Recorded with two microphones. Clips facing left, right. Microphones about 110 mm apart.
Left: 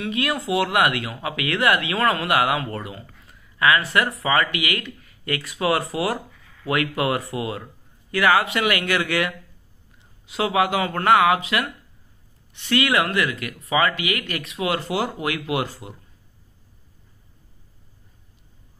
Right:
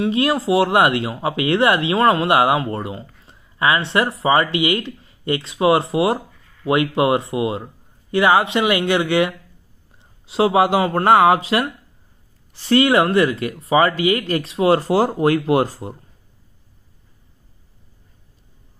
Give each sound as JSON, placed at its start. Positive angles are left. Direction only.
{"t": 0.0, "sound": "speech", "side_deg": -30}